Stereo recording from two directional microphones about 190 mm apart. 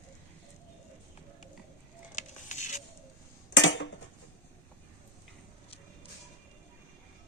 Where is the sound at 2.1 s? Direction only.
40° left (ahead or behind).